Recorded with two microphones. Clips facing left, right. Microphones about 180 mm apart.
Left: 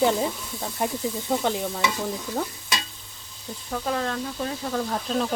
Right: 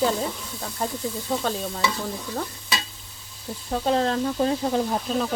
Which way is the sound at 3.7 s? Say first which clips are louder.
Right 5 dB; 25° right (ahead or behind).